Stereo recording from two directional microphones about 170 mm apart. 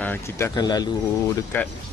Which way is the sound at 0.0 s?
10° left (ahead or behind).